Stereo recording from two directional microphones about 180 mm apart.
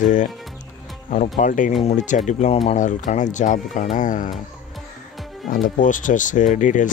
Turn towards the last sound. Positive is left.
turn(degrees=45)  # may be behind; listen again after turning